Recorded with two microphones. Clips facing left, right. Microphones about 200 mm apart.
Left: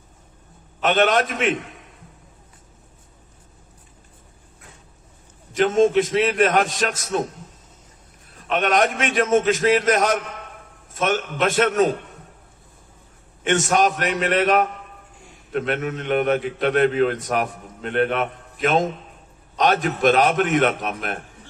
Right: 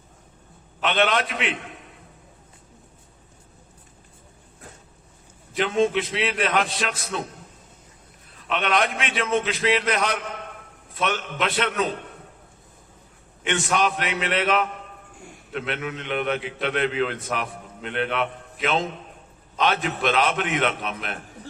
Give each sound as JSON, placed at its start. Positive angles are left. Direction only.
{"t": 0.8, "sound": "a man's voice", "side_deg": 45}
{"t": 5.5, "sound": "a man's voice", "side_deg": 45}
{"t": 8.4, "sound": "a man's voice", "side_deg": 45}
{"t": 13.4, "sound": "a man's voice", "side_deg": 45}